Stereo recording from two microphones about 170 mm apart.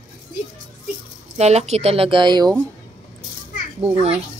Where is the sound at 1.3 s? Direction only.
40° right (ahead or behind).